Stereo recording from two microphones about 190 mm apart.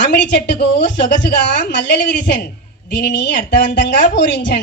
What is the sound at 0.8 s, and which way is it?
A woman's voice, 65° left (ahead or behind).